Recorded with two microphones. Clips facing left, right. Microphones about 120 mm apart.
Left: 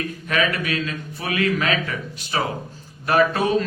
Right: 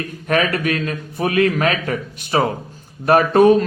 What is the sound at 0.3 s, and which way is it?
A man's voice, 50° right (ahead or behind).